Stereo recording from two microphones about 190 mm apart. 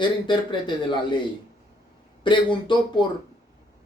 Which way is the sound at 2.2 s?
25° left (ahead or behind).